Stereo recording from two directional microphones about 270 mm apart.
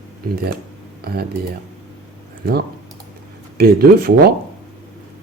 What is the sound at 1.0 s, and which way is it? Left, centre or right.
Speech, right.